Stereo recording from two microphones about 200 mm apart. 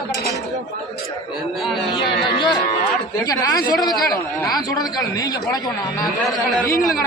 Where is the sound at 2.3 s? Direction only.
20° left (ahead or behind).